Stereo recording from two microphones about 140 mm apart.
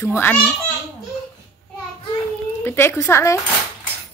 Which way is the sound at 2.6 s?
15° left (ahead or behind).